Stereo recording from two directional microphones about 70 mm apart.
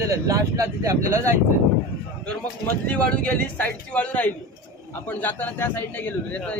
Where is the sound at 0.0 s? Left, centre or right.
Right.